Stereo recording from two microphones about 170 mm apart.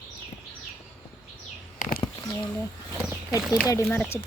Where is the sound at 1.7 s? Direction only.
60° left (ahead or behind).